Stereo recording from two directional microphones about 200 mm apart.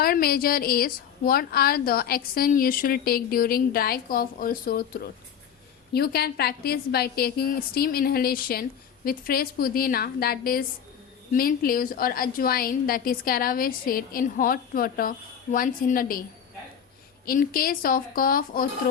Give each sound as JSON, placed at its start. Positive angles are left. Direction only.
{"t": 0.0, "sound": "a woman's voice", "side_deg": 50}
{"t": 17.2, "sound": "a woman's voice", "side_deg": 45}